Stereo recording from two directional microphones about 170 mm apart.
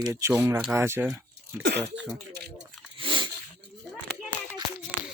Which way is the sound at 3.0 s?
30° right (ahead or behind).